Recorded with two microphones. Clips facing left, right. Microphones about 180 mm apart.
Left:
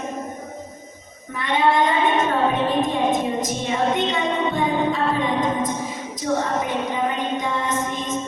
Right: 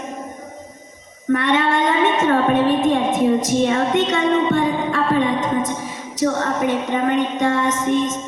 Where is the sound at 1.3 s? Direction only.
75° right (ahead or behind).